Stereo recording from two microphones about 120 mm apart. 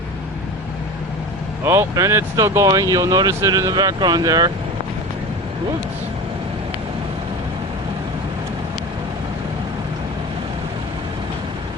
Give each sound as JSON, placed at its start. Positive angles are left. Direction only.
{"t": 1.6, "sound": "speech", "side_deg": -20}